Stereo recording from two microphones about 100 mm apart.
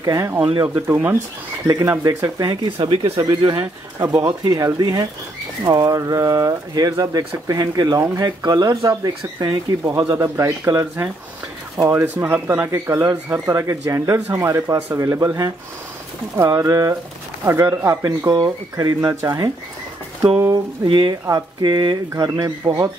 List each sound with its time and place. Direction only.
0.0 s speech: 35° right (ahead or behind)
1.7 s speech: 35° right (ahead or behind); by 3.6 s 50° right (ahead or behind)
4.0 s speech: 40° right (ahead or behind)
10.1 s speech: 30° right (ahead or behind)
18.4 s speech: 45° right (ahead or behind)
20.5 s speech: 50° right (ahead or behind)
22.1 s speech: 35° right (ahead or behind)